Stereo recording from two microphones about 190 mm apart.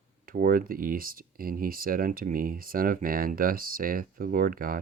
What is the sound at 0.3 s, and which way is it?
Speech, 50° right (ahead or behind).